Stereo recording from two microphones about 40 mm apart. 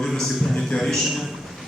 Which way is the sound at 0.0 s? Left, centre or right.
Centre.